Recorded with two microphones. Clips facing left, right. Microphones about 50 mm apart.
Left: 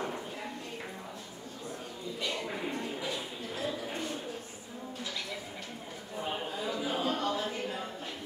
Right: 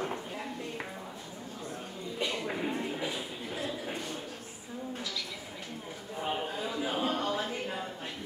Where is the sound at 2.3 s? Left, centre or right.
Centre.